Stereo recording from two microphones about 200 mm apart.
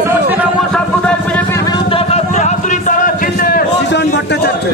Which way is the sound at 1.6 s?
25° left (ahead or behind).